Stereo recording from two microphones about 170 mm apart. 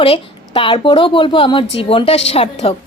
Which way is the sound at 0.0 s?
35° left (ahead or behind).